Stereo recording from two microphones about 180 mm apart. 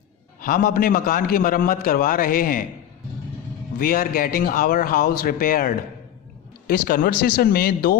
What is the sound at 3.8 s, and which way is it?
A man's voice, 55° left (ahead or behind).